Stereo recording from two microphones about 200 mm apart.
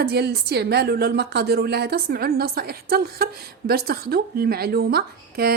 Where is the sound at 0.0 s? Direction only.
55° right (ahead or behind).